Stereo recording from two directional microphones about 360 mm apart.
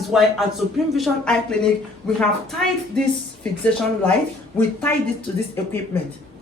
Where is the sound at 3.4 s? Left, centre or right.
Centre.